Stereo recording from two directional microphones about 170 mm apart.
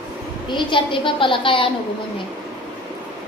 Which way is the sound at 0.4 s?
30° left (ahead or behind).